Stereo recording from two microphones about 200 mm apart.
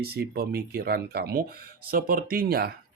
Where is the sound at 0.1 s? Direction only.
50° right (ahead or behind).